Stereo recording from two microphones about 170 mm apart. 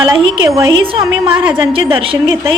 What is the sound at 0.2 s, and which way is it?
A woman's voice, 30° right (ahead or behind).